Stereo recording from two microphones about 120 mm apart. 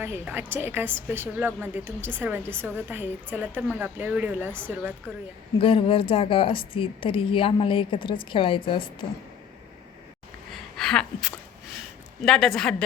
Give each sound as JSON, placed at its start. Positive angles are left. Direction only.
{"t": 0.0, "sound": "a woman's voice", "side_deg": -15}
{"t": 5.5, "sound": "speech", "side_deg": 50}
{"t": 10.5, "sound": "a sound", "side_deg": 5}
{"t": 12.2, "sound": "a woman's voice", "side_deg": 5}